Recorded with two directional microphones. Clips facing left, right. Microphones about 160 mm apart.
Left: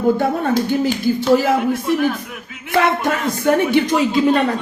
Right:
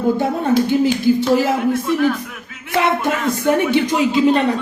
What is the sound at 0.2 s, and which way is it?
Speech, 20° right (ahead or behind).